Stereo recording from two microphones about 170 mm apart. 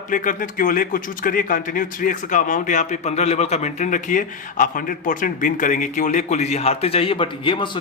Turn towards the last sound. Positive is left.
turn(degrees=30)  # may be behind; listen again after turning